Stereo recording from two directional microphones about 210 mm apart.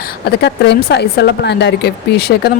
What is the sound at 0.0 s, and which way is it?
A woman's voice, 50° left (ahead or behind).